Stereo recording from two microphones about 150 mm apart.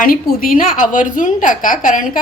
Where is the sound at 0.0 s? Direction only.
65° left (ahead or behind).